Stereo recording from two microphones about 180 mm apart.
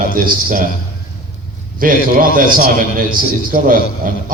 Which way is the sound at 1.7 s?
50° right (ahead or behind).